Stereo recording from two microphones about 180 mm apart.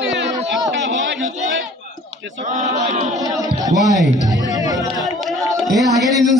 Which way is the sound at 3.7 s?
40° left (ahead or behind).